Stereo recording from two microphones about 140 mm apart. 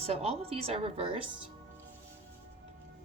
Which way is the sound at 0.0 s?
45° right (ahead or behind).